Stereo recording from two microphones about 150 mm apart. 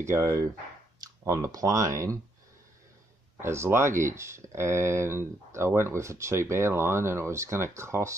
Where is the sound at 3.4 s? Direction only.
15° right (ahead or behind).